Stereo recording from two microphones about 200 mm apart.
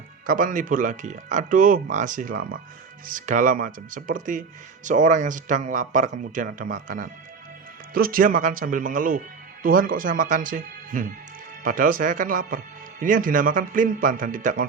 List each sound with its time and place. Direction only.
0.3 s speech: 40° right (ahead or behind)